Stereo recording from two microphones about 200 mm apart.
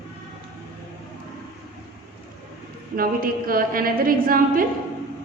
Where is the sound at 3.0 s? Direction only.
45° right (ahead or behind).